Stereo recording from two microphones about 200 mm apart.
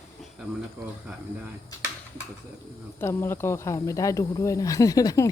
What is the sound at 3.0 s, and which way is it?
Speech, 10° left (ahead or behind).